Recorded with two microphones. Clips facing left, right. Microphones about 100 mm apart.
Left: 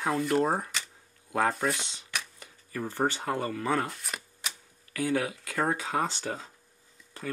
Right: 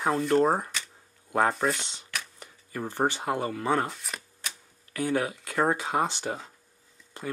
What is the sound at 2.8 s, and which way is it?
Speech, 15° right (ahead or behind).